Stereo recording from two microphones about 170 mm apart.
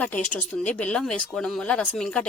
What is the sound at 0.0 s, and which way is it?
Speech, 10° left (ahead or behind).